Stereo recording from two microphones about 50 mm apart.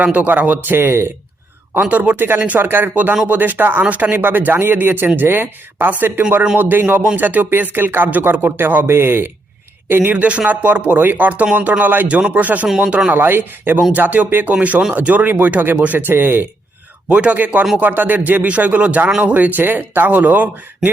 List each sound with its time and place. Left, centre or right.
0.0 s speech: right
1.8 s speech: right
10.2 s speech: right
13.1 s speech: right
13.9 s speech: right
14.3 s speech: right
14.5 s speech: right
17.1 s speech: right